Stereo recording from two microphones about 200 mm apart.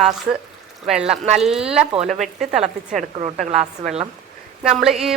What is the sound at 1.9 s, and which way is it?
Speech, 35° right (ahead or behind).